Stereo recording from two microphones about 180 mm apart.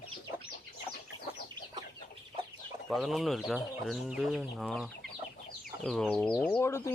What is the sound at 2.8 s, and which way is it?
Speech, centre (ahead or behind).